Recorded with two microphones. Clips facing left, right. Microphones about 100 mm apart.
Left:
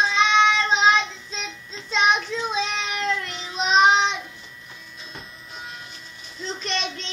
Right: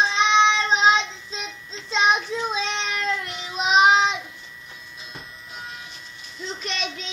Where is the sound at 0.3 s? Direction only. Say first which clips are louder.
Right 1 dB; 20° right (ahead or behind).